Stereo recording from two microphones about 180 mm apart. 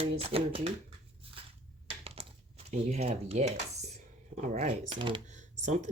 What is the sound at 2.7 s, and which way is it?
Cutlery, 40° right (ahead or behind).